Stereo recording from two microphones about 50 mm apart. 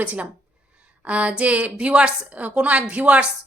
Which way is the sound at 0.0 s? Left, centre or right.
Right.